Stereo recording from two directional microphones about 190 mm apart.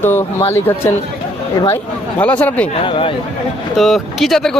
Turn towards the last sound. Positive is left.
turn(degrees=0)  # may be behind; listen again after turning